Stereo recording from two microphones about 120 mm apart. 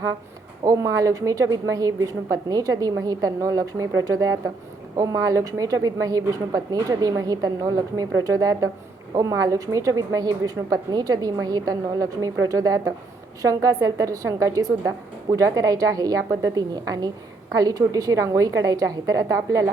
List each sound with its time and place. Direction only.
0.6 s a woman's voice: 25° right (ahead or behind)